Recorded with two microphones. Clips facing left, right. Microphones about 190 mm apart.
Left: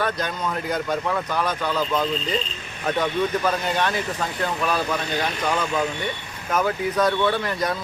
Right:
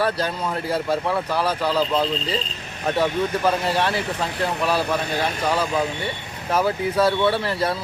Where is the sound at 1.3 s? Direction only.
30° right (ahead or behind).